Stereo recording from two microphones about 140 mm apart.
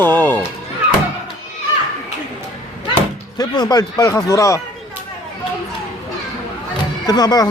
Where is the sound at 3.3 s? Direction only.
30° left (ahead or behind).